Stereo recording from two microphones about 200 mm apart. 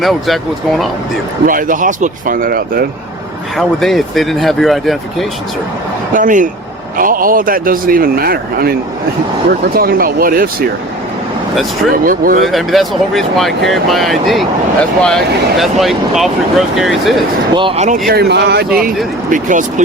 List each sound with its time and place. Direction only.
0.0 s speech: centre (ahead or behind)
1.5 s speech: 40° right (ahead or behind)
3.6 s speech: centre (ahead or behind)
6.1 s speech: 40° right (ahead or behind)
12.0 s speech: 45° right (ahead or behind)
12.5 s speech: centre (ahead or behind)
17.5 s speech: 25° right (ahead or behind)
18.1 s speech: 55° right (ahead or behind)
19.3 s speech: 40° right (ahead or behind)